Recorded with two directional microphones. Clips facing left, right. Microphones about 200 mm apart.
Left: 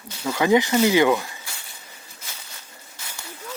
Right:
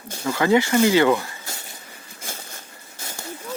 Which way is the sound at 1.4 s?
40° right (ahead or behind).